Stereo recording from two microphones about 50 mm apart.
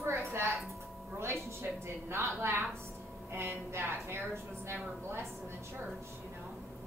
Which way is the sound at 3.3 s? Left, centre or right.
Right.